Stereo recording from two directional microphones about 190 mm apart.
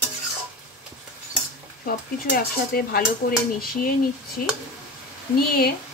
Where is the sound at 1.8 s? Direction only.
50° left (ahead or behind).